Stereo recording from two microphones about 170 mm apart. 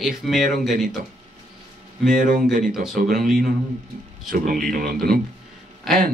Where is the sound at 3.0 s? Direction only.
55° right (ahead or behind).